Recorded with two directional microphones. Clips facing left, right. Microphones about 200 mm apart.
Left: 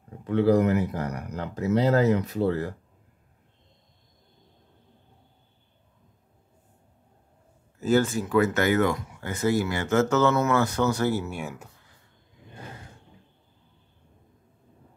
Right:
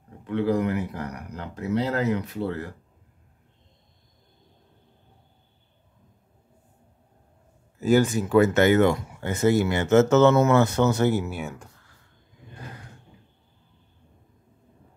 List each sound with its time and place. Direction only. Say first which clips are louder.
0.3 s speech: left 3 dB; 40° left (ahead or behind)
7.8 s speech: right 2 dB; 15° right (ahead or behind)
11.2 s speech: right 1 dB; centre (ahead or behind)